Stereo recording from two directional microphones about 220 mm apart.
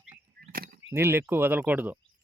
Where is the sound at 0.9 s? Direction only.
10° right (ahead or behind).